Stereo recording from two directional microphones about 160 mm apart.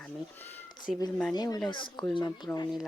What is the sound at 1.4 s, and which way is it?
Speech, 25° left (ahead or behind).